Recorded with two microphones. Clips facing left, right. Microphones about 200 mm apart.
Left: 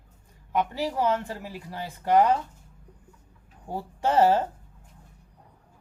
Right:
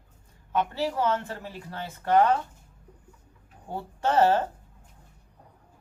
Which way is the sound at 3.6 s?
10° left (ahead or behind).